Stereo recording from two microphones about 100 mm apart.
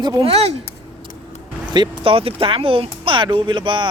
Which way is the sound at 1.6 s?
45° right (ahead or behind).